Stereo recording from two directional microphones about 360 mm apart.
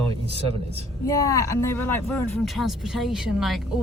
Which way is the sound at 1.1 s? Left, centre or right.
Centre.